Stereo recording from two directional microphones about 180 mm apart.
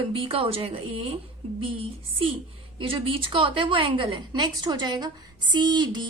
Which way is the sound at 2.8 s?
30° right (ahead or behind).